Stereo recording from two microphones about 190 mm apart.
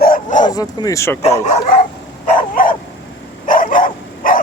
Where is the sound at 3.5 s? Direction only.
45° left (ahead or behind).